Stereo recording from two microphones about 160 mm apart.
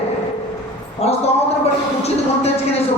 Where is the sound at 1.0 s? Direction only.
40° left (ahead or behind).